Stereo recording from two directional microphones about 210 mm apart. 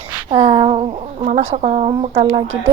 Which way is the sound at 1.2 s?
35° right (ahead or behind).